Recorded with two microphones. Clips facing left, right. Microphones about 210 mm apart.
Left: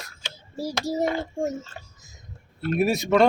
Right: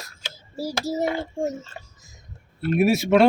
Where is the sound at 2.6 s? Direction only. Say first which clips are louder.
Right 3 dB; 10° right (ahead or behind).